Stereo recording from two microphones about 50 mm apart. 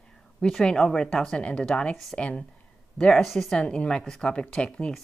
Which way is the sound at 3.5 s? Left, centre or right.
Left.